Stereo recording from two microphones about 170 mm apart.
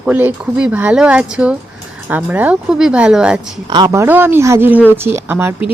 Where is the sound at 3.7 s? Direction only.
25° right (ahead or behind).